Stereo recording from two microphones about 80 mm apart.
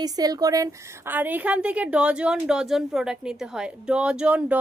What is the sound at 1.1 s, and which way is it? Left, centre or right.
A woman's voice, right.